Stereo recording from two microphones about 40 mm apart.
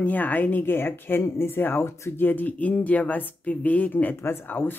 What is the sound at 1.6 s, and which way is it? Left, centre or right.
Speech, left.